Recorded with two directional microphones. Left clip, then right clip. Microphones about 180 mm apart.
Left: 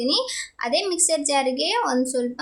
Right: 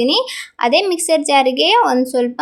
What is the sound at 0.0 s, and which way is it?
A woman's voice, 30° right (ahead or behind).